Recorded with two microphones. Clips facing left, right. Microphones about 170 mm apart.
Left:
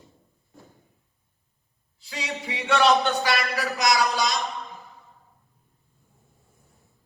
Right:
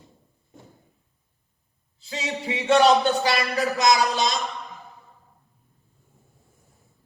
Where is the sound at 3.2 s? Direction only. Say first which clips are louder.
Right 3 dB; 20° right (ahead or behind).